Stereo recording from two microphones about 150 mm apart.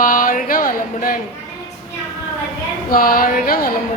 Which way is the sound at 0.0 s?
65° left (ahead or behind).